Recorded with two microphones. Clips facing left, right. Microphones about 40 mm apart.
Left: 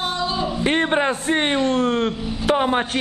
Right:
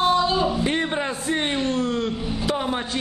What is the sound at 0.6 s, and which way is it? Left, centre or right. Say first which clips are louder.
A man's voice: left 5 dB; left.